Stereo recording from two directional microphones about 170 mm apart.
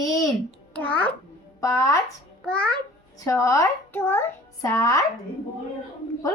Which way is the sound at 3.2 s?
20° left (ahead or behind).